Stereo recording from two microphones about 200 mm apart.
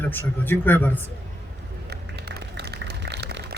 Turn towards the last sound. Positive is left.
turn(degrees=-55)  # may be behind; listen again after turning